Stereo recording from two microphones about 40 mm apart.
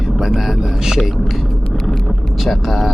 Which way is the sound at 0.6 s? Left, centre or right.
Centre.